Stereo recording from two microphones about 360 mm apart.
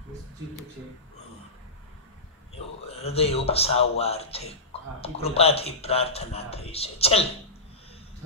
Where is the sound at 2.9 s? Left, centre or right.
Centre.